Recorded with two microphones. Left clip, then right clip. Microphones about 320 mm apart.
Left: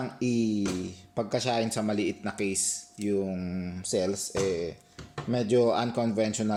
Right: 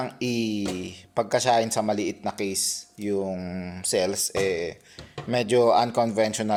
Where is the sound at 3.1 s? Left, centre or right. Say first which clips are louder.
Right 3 dB; right.